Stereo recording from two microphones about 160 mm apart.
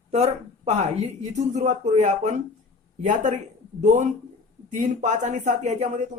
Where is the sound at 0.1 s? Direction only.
45° right (ahead or behind).